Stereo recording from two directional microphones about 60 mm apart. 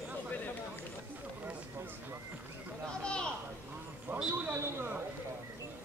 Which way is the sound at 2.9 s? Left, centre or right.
Centre.